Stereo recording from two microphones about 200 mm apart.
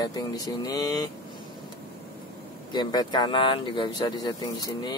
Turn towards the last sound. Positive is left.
turn(degrees=20)  # may be behind; listen again after turning